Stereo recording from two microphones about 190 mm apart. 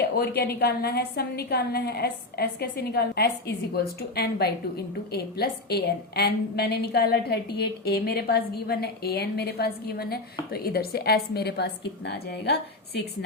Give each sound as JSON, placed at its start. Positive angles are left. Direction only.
{"t": 0.0, "sound": "a woman's voice", "side_deg": 55}